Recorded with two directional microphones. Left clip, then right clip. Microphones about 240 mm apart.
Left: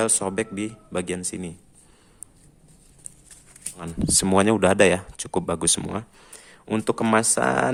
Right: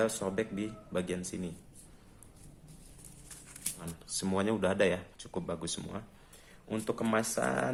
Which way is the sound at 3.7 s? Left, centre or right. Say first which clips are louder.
Left 19 dB; left.